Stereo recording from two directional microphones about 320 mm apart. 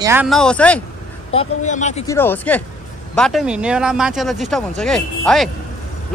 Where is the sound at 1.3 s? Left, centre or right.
Left.